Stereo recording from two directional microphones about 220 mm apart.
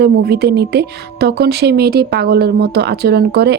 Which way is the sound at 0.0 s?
45° right (ahead or behind).